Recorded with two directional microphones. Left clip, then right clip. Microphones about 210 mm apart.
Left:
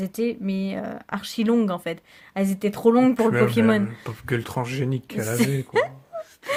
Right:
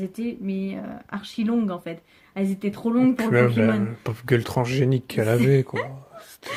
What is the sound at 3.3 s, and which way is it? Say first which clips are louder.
Speech: even; 15° right (ahead or behind).